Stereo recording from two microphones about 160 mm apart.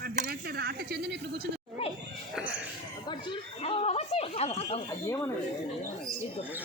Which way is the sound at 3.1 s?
30° left (ahead or behind).